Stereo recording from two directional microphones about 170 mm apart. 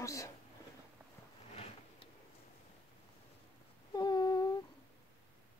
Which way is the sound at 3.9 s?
25° left (ahead or behind).